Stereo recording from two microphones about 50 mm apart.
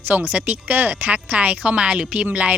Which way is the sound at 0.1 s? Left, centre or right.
Right.